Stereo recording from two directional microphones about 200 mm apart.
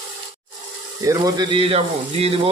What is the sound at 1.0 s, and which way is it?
Speech, 20° right (ahead or behind).